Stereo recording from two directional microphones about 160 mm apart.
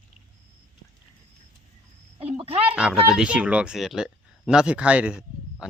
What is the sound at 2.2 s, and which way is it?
Speech, 40° right (ahead or behind).